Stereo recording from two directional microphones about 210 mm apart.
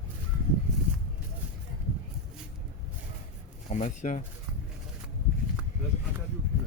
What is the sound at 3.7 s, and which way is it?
Speech, 35° left (ahead or behind).